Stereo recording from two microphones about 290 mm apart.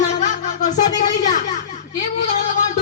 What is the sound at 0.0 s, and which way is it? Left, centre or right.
Music, left.